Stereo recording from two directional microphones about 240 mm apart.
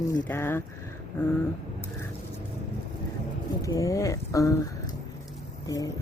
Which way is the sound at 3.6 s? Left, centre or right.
Centre.